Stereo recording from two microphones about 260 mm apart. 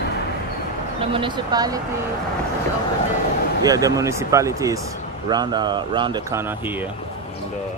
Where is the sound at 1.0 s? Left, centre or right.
Centre.